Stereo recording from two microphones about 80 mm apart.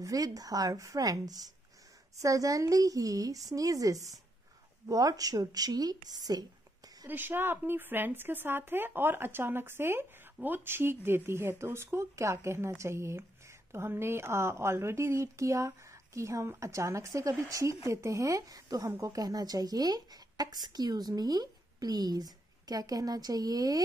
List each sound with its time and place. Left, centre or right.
0.0 s speech: right
7.1 s a woman's voice: right